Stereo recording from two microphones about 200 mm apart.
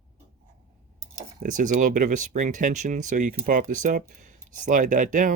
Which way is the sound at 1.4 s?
40° right (ahead or behind).